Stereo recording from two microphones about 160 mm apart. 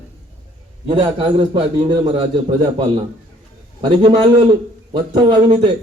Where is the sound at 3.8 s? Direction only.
35° right (ahead or behind).